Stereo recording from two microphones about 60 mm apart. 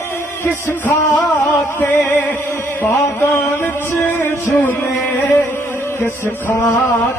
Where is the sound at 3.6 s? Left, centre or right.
Left.